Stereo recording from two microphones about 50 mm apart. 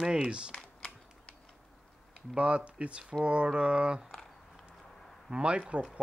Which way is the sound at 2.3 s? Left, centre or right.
Right.